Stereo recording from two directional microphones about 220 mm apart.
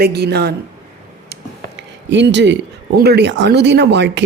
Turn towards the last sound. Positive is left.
turn(degrees=-50)  # may be behind; listen again after turning